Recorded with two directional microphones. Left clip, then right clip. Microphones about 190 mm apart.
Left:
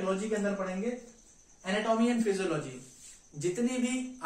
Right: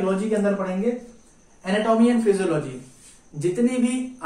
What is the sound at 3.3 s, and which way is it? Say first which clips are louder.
Speech: right 9 dB; 15° left (ahead or behind).